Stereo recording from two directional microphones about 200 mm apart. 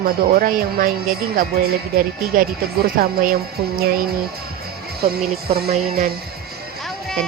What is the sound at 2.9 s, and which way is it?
Speech, 45° right (ahead or behind).